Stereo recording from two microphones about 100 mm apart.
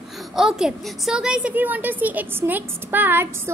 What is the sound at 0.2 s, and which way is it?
A woman's voice, 5° right (ahead or behind).